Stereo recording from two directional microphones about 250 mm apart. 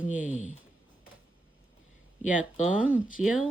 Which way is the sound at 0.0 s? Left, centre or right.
Left.